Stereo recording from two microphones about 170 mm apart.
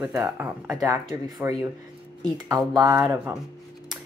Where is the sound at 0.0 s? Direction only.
15° right (ahead or behind).